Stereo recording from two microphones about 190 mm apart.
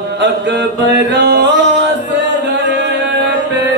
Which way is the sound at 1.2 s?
65° right (ahead or behind).